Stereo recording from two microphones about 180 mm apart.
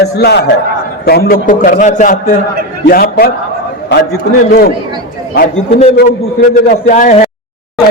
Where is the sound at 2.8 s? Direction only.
55° left (ahead or behind).